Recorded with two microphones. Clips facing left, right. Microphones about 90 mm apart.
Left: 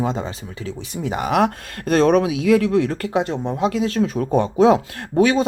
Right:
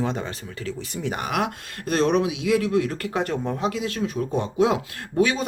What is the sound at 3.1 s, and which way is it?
Speech, 20° left (ahead or behind).